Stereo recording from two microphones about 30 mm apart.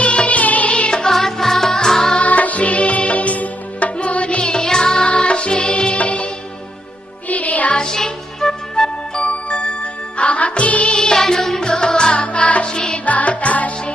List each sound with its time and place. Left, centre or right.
0.0 s music: left
0.7 s music: left
1.1 s music: centre
2.2 s music: left
3.9 s music: left
4.4 s music: left
4.9 s music: left
7.3 s music: left
7.8 s music: centre
9.2 s music: left
10.9 s music: left
12.1 s music: left
12.6 s music: left
13.1 s music: left